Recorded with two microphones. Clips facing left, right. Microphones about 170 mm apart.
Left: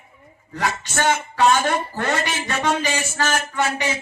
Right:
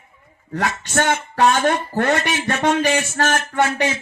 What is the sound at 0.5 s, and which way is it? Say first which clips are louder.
Speech: right 3 dB; 55° right (ahead or behind).